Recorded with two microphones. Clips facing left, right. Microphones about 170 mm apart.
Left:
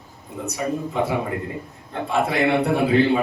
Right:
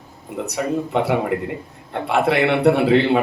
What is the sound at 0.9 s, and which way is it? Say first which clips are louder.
A man's voice: right 5 dB; 75° right (ahead or behind).